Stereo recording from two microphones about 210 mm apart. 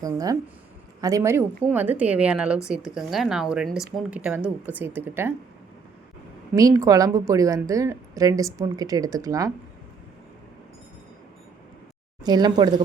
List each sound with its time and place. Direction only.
0.0 s a woman's voice: 15° right (ahead or behind)
6.5 s a woman's voice: 15° right (ahead or behind)
12.2 s speech: 20° right (ahead or behind)